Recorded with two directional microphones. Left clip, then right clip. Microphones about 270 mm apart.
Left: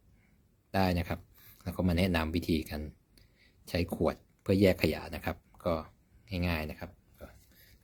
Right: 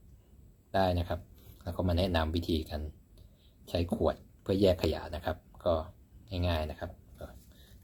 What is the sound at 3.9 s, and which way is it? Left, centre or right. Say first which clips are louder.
Speech: right 3 dB; left.